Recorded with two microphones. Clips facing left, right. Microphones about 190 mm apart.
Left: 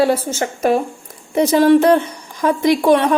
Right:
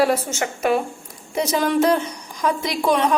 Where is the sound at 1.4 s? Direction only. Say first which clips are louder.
Left 8 dB; 55° left (ahead or behind).